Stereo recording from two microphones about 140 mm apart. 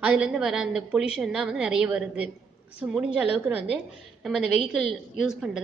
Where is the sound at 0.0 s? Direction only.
10° right (ahead or behind).